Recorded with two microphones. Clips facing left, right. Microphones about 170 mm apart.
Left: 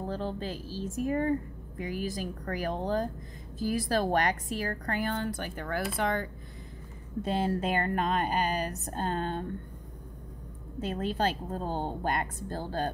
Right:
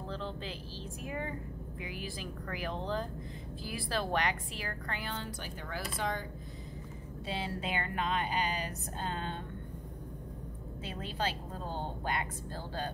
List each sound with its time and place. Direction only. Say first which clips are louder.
0.0 s a woman's voice: left 6 dB; 45° left (ahead or behind); by 6.2 s 60° left (ahead or behind)
7.2 s a woman's voice: left 9 dB; 45° left (ahead or behind)
10.8 s a woman's voice: left 8 dB; 45° left (ahead or behind)